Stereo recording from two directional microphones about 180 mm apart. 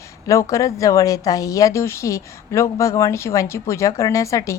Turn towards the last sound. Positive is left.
turn(degrees=15)  # may be behind; listen again after turning